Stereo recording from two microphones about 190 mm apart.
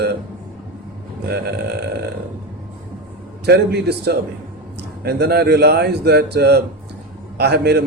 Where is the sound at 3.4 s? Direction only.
60° right (ahead or behind).